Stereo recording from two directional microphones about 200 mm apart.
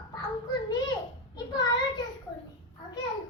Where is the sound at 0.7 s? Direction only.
20° left (ahead or behind).